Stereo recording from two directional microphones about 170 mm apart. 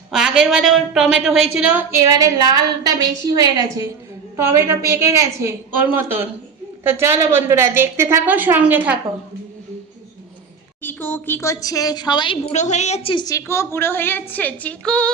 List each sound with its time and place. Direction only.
0.1 s a woman's voice: 5° right (ahead or behind)
10.8 s a woman's voice: 10° left (ahead or behind); by 13.2 s 35° left (ahead or behind)
13.2 s a woman's voice: 15° left (ahead or behind)